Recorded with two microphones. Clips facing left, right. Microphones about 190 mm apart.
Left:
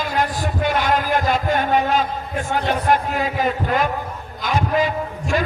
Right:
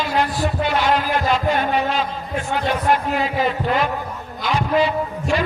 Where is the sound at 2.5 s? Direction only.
45° left (ahead or behind).